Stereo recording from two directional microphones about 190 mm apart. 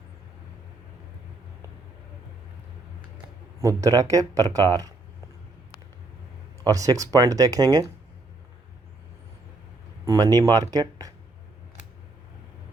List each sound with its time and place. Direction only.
3.6 s speech: 15° right (ahead or behind)
6.7 s speech: 15° right (ahead or behind)
10.3 s speech: 20° right (ahead or behind)